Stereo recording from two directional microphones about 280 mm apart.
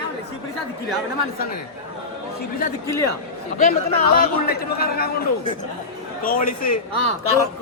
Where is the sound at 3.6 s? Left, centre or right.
Left.